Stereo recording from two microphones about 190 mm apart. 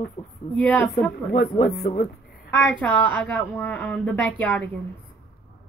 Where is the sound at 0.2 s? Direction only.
40° left (ahead or behind).